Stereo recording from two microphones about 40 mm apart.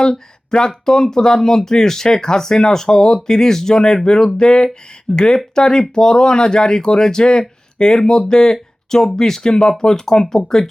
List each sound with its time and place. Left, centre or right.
0.5 s speech: centre